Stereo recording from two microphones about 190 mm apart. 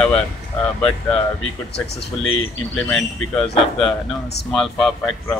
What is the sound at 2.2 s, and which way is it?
Speech, 90° left.